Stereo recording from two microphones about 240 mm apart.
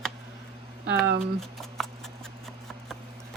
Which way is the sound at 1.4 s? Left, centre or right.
Centre.